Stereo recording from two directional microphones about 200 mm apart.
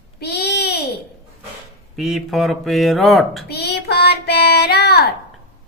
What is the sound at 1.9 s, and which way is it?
Speech, centre (ahead or behind).